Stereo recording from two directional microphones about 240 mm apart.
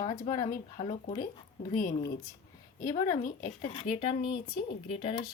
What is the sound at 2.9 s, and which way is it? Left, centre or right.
Speech, left.